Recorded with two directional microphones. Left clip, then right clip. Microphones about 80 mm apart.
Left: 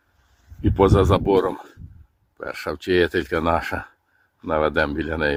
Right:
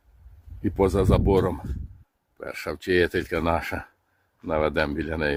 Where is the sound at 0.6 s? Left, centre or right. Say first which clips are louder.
Left 5 dB; centre.